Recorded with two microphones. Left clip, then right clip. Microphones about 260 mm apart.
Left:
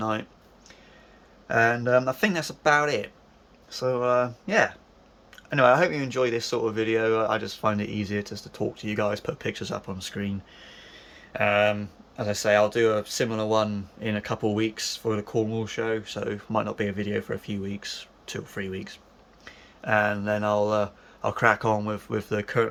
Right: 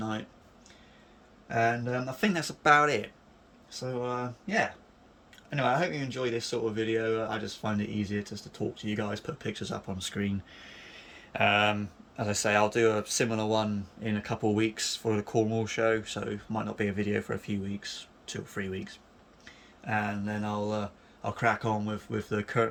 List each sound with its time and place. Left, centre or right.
1.5 s speech: centre